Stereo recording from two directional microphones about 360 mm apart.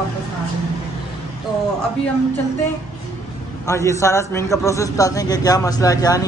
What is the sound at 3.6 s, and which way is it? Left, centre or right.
A man's voice, centre.